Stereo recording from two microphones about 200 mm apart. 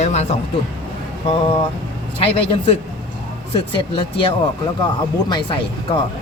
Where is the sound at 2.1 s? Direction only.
25° left (ahead or behind).